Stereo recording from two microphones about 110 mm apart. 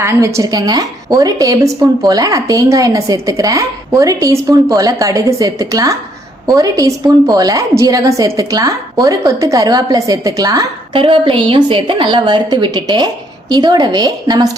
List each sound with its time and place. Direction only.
0.0 s a woman's voice: 25° right (ahead or behind)
10.9 s a woman's voice: 50° right (ahead or behind)